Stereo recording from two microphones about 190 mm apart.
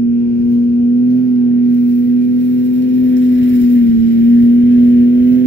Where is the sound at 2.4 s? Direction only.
70° left (ahead or behind).